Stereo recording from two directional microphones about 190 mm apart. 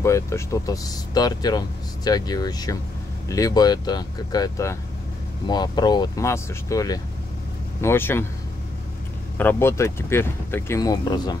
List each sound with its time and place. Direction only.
0.0 s speech: 15° left (ahead or behind)
9.4 s speech: 10° left (ahead or behind)